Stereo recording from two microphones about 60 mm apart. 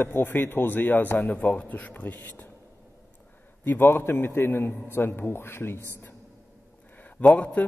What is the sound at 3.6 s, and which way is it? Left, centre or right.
A man's voice, left.